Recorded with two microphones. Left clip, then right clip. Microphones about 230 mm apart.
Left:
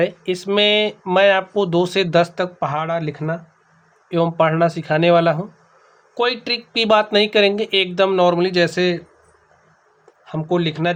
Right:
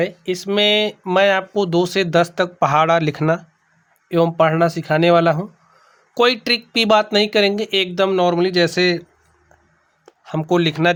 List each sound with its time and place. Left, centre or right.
0.0 s speech: centre; by 3.4 s right
4.1 s speech: right
10.2 s speech: right